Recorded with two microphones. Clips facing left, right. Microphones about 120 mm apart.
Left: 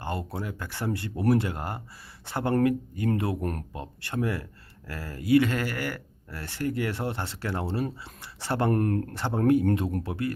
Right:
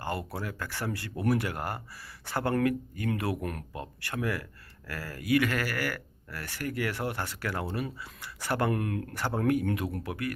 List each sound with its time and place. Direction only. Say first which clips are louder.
0.0 s speech: left 1 dB; 20° left (ahead or behind)
8.7 s speech: left 6 dB; 40° left (ahead or behind)
9.1 s speech: left 4 dB; 20° left (ahead or behind)